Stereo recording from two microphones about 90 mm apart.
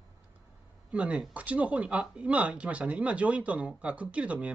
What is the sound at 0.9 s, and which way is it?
Speech, 15° right (ahead or behind).